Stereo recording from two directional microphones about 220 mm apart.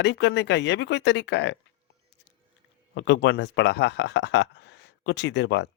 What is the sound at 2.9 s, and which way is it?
Speech, 55° left (ahead or behind).